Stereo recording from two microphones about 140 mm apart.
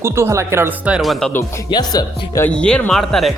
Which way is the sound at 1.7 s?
35° left (ahead or behind).